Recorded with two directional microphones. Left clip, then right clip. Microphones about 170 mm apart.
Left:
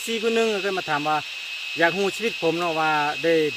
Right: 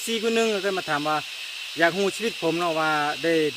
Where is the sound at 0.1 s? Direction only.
Centre (ahead or behind).